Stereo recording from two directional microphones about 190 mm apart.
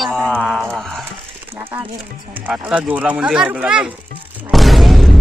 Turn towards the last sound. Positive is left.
turn(degrees=0)  # may be behind; listen again after turning